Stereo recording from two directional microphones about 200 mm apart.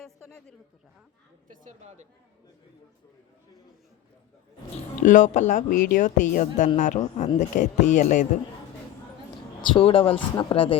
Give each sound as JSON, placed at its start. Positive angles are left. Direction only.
{"t": 0.0, "sound": "a sound", "side_deg": 5}
{"t": 1.5, "sound": "a woman's voice", "side_deg": -35}
{"t": 5.0, "sound": "speech", "side_deg": 40}
{"t": 9.7, "sound": "speech", "side_deg": 25}